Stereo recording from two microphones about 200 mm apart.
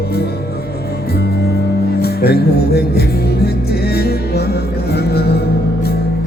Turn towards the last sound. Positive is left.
turn(degrees=55)  # may be behind; listen again after turning